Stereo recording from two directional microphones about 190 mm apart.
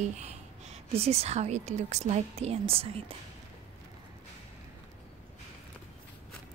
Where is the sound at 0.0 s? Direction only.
35° right (ahead or behind).